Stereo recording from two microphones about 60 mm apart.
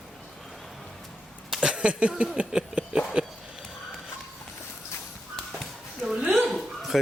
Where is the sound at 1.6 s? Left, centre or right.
Centre.